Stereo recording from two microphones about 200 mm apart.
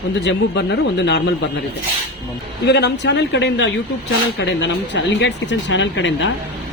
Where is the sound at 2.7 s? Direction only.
55° left (ahead or behind).